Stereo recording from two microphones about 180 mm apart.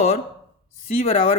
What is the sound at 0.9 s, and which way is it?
Speech, 30° left (ahead or behind).